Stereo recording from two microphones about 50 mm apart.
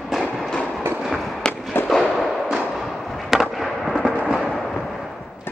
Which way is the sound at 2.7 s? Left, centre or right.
Centre.